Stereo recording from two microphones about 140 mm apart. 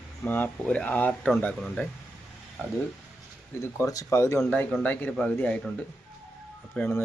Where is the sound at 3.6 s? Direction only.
20° left (ahead or behind).